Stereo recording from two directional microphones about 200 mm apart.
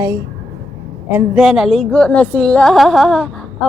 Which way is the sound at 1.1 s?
5° right (ahead or behind).